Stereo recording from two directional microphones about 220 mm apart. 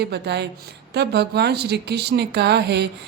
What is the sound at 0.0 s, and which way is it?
A woman's voice, 50° right (ahead or behind).